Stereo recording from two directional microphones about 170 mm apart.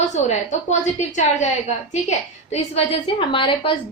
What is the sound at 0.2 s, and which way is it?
A woman's voice, 45° left (ahead or behind).